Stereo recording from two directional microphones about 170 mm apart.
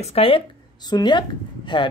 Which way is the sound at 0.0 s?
35° left (ahead or behind).